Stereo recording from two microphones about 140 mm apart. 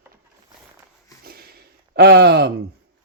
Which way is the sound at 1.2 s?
90° right.